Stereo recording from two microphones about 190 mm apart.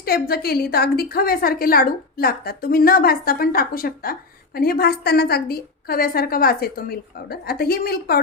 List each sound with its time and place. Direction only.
0.0 s a woman's voice: 55° left (ahead or behind)